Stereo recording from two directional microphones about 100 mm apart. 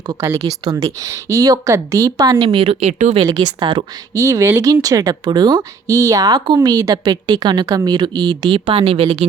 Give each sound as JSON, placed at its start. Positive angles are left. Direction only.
{"t": 0.1, "sound": "speech", "side_deg": -30}
{"t": 2.5, "sound": "speech", "side_deg": -65}
{"t": 3.2, "sound": "speech", "side_deg": -45}
{"t": 4.1, "sound": "speech", "side_deg": -35}